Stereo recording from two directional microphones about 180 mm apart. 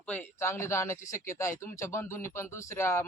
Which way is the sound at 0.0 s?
10° left (ahead or behind).